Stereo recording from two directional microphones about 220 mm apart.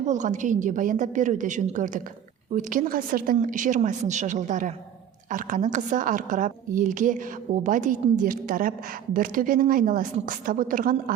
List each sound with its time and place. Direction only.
0.0 s a woman's voice: 35° right (ahead or behind)